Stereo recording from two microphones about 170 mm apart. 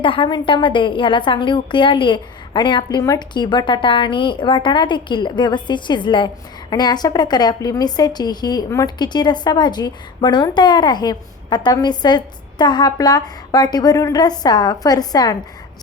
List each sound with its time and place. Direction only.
0.0 s a woman's voice: 30° left (ahead or behind)